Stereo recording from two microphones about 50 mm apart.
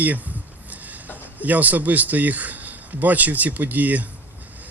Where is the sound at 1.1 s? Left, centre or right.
Right.